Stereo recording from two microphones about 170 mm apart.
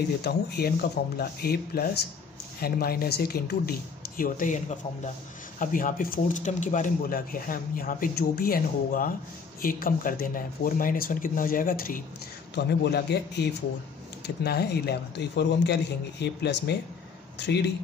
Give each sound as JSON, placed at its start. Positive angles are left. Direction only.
{"t": 0.2, "sound": "speech", "side_deg": 70}
{"t": 4.2, "sound": "a man's voice", "side_deg": 50}
{"t": 12.5, "sound": "speech", "side_deg": 80}